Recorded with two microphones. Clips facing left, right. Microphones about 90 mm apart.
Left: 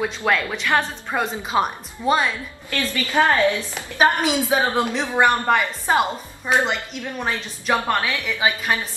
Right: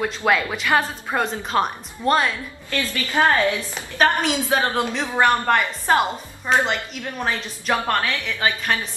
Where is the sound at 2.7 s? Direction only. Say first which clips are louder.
Left 1 dB; 15° left (ahead or behind).